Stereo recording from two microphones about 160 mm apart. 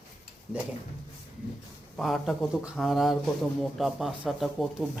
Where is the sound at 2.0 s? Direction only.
Centre (ahead or behind).